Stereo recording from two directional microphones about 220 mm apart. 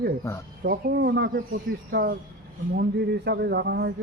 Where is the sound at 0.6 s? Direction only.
45° right (ahead or behind).